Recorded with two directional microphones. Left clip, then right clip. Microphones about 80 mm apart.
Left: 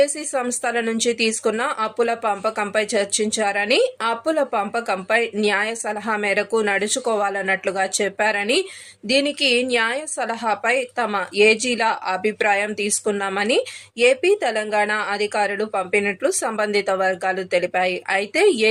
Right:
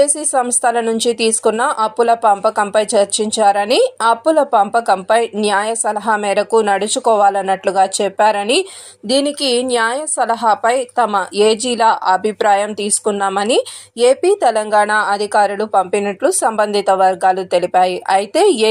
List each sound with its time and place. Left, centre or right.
0.3 s speech: right
17.0 s speech: left
17.7 s speech: right